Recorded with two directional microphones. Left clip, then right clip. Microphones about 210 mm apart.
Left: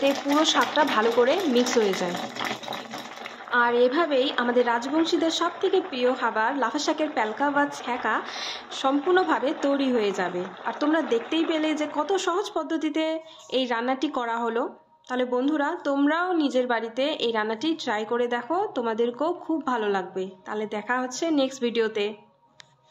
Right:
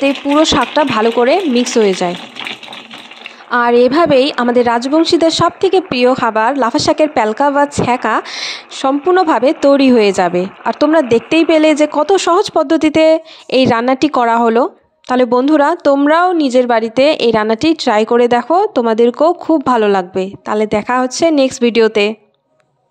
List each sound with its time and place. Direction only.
0.0 s a woman's voice: 45° right (ahead or behind)
3.4 s a woman's voice: 50° right (ahead or behind)